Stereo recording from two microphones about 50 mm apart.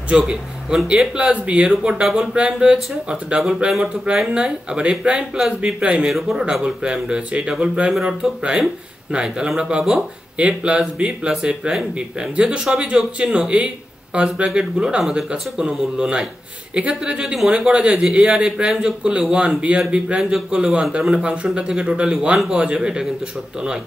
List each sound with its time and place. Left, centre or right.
0.1 s speech: centre
6.0 s speech: centre
6.4 s speech: centre